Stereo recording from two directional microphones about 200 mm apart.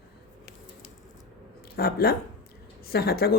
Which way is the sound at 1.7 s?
50° left (ahead or behind).